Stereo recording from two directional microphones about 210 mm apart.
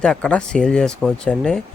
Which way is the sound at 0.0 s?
5° left (ahead or behind).